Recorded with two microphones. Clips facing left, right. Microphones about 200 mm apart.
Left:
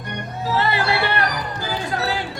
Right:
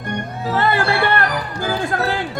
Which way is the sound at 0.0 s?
50° right (ahead or behind).